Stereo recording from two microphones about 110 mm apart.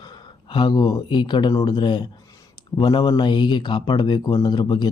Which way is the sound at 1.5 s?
30° left (ahead or behind).